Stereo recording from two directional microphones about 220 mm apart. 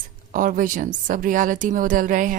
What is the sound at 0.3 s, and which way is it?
A woman's voice, 40° right (ahead or behind).